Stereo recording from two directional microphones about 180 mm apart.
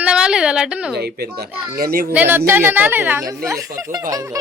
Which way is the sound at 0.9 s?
65° right (ahead or behind).